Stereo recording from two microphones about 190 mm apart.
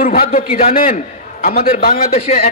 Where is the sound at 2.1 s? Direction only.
35° left (ahead or behind).